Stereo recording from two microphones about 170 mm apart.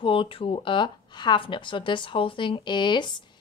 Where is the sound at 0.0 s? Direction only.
30° left (ahead or behind).